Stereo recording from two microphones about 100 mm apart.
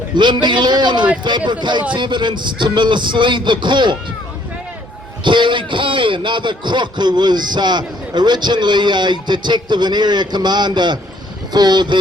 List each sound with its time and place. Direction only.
0.2 s a man's voice: 50° right (ahead or behind)
5.2 s a man's voice: 55° right (ahead or behind)